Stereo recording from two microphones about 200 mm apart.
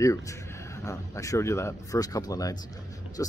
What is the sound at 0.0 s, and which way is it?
Speech, 15° left (ahead or behind).